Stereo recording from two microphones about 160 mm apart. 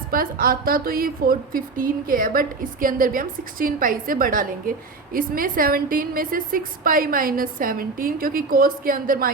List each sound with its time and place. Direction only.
0.1 s a woman's voice: 65° right (ahead or behind)